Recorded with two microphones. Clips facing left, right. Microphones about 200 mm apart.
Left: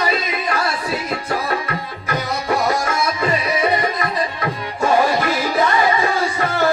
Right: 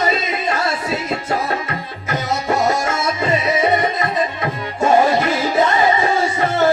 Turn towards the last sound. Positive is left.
turn(degrees=-25)  # may be behind; listen again after turning